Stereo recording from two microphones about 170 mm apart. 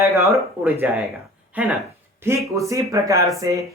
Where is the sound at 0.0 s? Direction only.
15° right (ahead or behind).